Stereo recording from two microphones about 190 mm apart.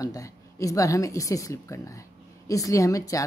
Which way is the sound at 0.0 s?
15° left (ahead or behind).